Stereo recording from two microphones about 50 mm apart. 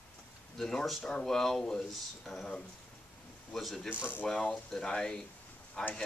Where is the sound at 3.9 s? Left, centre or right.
Left.